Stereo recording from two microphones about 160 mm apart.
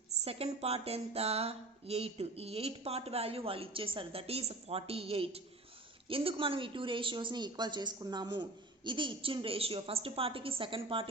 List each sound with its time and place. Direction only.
0.3 s speech: 40° right (ahead or behind)